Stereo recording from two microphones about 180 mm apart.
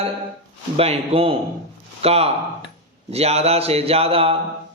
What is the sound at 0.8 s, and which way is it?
Speech, 30° right (ahead or behind).